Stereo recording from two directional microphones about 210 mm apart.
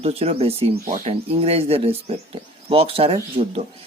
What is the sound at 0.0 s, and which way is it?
Speech, 30° right (ahead or behind).